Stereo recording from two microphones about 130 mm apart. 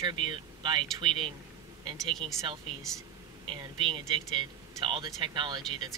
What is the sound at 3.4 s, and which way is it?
Speech, 35° right (ahead or behind).